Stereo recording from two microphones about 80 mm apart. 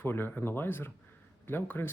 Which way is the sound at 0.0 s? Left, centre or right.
Left.